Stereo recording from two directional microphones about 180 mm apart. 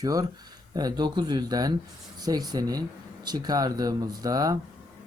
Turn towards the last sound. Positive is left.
turn(degrees=-20)  # may be behind; listen again after turning